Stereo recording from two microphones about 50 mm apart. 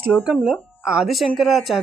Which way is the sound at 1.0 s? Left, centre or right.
Centre.